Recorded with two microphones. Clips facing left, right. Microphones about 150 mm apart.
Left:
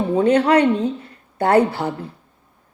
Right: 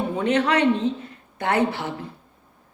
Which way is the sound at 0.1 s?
35° left (ahead or behind).